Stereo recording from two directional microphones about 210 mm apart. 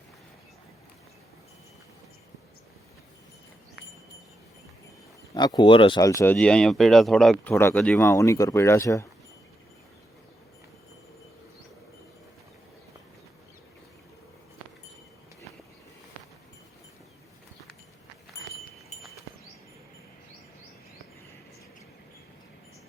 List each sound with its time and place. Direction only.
5.3 s speech: 20° left (ahead or behind)
6.3 s speech: 5° left (ahead or behind)